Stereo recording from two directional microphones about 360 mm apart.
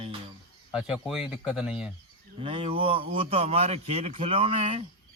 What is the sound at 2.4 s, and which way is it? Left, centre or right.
Speech, centre.